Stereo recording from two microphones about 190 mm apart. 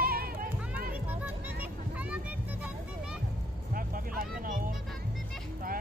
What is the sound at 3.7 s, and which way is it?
Vehicle, 50° right (ahead or behind).